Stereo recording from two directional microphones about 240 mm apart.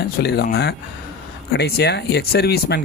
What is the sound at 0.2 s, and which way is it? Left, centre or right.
Speech, left.